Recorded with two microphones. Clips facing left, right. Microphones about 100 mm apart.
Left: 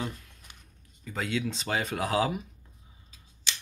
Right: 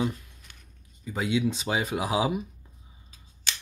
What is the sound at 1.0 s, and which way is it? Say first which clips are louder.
Speech: right 5 dB; 10° right (ahead or behind).